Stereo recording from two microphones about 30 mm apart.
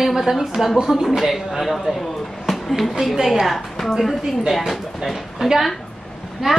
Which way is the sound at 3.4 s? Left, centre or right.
Centre.